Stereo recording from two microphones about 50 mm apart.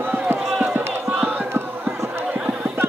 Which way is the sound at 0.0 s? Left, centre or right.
Right.